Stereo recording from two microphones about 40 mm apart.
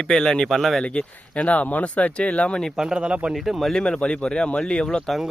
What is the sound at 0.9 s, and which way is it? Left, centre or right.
Speech, left.